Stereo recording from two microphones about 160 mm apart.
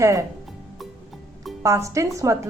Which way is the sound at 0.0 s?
20° right (ahead or behind).